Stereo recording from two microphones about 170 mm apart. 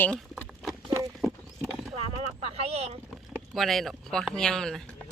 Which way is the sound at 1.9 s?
35° right (ahead or behind).